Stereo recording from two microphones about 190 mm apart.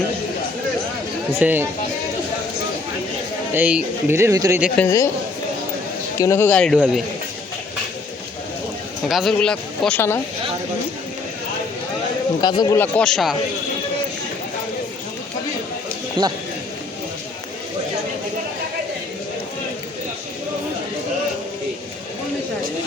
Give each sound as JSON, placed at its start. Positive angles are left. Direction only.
{"t": 1.4, "sound": "speech", "side_deg": -10}
{"t": 3.5, "sound": "speech", "side_deg": -5}
{"t": 4.8, "sound": "speech", "side_deg": 15}
{"t": 6.1, "sound": "speech", "side_deg": 15}
{"t": 6.7, "sound": "speech", "side_deg": -5}
{"t": 9.0, "sound": "speech", "side_deg": 0}
{"t": 12.4, "sound": "speech", "side_deg": 20}
{"t": 16.2, "sound": "speech", "side_deg": -25}